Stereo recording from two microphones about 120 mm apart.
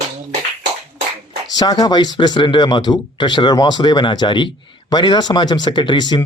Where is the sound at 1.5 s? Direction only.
35° left (ahead or behind).